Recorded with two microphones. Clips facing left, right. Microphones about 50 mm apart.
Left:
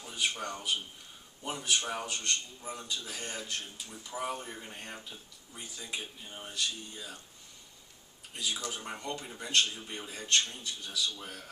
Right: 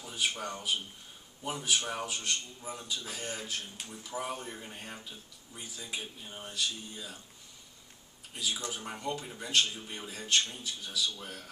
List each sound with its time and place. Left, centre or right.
0.0 s a man's voice: centre
8.6 s speech: centre